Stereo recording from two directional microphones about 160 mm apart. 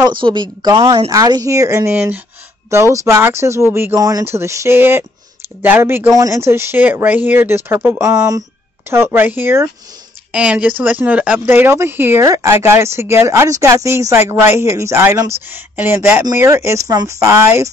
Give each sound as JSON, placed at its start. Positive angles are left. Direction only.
{"t": 0.0, "sound": "speech", "side_deg": -30}